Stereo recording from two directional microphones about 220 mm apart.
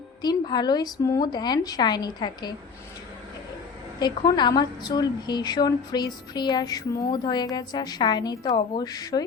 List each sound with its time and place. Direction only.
0.2 s speech: 20° left (ahead or behind)
4.0 s speech: 20° left (ahead or behind)